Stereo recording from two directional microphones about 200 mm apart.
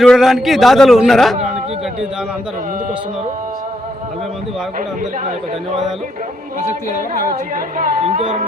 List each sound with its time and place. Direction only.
0.0 s a man's voice: centre (ahead or behind)
7.8 s speech: 40° right (ahead or behind)